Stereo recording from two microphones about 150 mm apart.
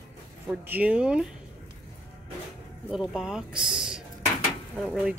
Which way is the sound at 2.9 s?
5° right (ahead or behind).